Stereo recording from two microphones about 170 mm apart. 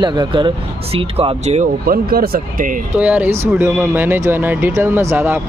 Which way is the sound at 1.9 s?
60° right (ahead or behind).